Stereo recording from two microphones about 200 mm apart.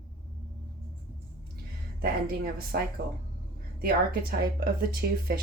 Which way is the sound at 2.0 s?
50° right (ahead or behind).